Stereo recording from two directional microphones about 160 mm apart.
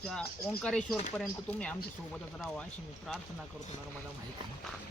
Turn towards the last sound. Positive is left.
turn(degrees=0)  # may be behind; listen again after turning